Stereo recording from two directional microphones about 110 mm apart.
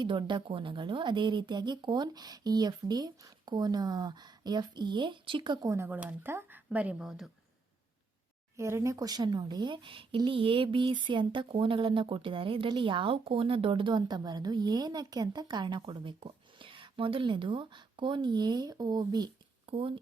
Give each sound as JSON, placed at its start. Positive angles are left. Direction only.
{"t": 0.0, "sound": "speech", "side_deg": -45}
{"t": 5.6, "sound": "speech", "side_deg": -25}
{"t": 8.5, "sound": "speech", "side_deg": -25}
{"t": 19.6, "sound": "speech", "side_deg": -55}